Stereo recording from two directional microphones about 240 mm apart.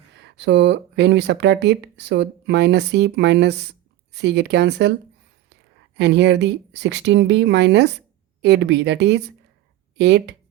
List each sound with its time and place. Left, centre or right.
0.2 s speech: right
6.0 s speech: right